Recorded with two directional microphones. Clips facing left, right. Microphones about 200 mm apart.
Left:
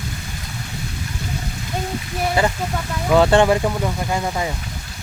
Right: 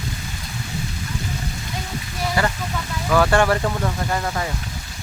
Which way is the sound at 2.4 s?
20° left (ahead or behind).